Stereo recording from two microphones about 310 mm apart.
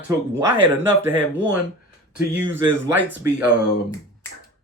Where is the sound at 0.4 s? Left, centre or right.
Centre.